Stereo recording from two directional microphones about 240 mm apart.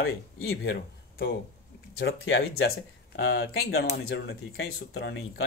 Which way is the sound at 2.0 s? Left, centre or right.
Left.